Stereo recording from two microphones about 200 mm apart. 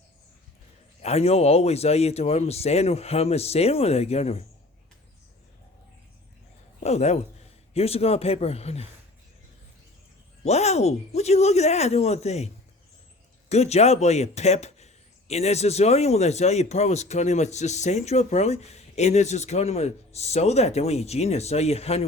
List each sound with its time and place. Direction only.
1.0 s speech: 30° left (ahead or behind)
6.7 s a sound: 35° left (ahead or behind)
7.7 s speech: 30° left (ahead or behind)
10.4 s speech: 35° left (ahead or behind)
13.5 s speech: 30° left (ahead or behind)